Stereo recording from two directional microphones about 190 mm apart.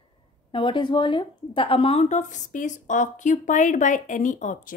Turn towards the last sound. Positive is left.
turn(degrees=40)  # may be behind; listen again after turning